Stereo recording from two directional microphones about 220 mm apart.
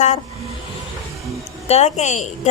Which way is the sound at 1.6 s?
30° left (ahead or behind).